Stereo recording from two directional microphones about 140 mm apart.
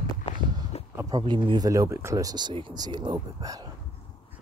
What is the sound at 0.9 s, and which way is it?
Speech, 30° right (ahead or behind).